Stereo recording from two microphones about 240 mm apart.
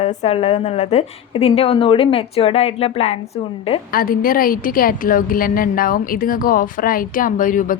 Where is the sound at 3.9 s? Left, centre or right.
Left.